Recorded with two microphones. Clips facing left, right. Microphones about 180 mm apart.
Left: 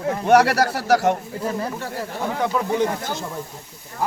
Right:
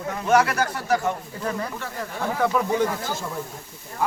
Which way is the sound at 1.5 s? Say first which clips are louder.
Left 2 dB; 30° left (ahead or behind).